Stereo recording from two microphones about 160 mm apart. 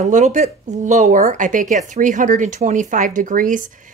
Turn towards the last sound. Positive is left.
turn(degrees=-55)  # may be behind; listen again after turning